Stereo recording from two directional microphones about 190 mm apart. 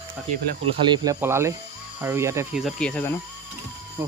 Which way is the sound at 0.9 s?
15° right (ahead or behind).